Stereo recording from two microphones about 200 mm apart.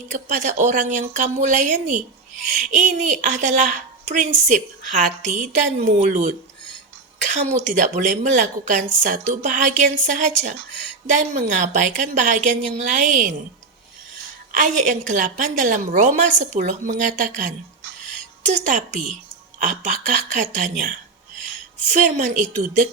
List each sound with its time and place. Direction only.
0.1 s a woman's voice: 40° right (ahead or behind)
14.5 s a woman's voice: 40° right (ahead or behind)